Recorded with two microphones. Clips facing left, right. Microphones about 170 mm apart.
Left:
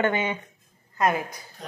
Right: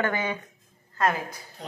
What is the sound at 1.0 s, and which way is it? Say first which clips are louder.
Speech: left 2 dB; 10° left (ahead or behind).